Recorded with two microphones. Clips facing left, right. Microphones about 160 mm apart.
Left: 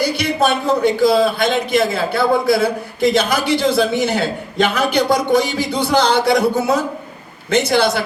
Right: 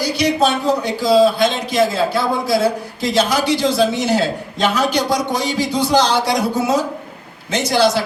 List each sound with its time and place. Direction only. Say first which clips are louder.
0.0 s a man's voice: right 1 dB; 55° left (ahead or behind)